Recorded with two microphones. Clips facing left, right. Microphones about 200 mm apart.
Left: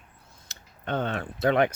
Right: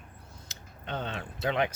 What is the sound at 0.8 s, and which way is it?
Speech, 55° left (ahead or behind).